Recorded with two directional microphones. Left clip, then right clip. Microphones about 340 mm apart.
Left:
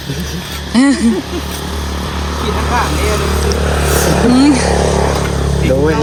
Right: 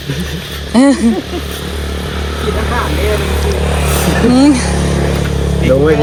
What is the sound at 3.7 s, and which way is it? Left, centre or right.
Speech, left.